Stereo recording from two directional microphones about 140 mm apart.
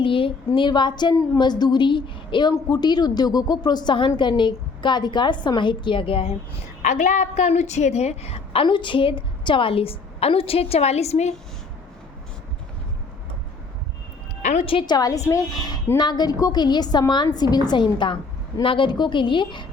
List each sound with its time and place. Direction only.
0.0 s a woman's voice: 40° left (ahead or behind)
6.8 s a woman's voice: 65° left (ahead or behind); by 8.6 s 50° left (ahead or behind)
8.6 s a woman's voice: 35° left (ahead or behind); by 11.3 s 50° left (ahead or behind)
14.4 s a woman's voice: 45° left (ahead or behind)